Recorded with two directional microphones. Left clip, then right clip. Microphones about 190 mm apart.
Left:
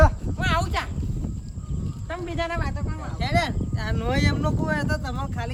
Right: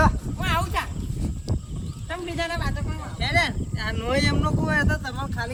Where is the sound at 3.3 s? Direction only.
50° left (ahead or behind).